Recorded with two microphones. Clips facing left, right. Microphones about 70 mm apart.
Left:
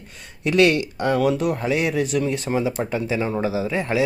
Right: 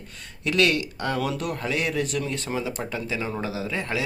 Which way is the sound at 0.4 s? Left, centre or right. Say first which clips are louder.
Left 5 dB; left.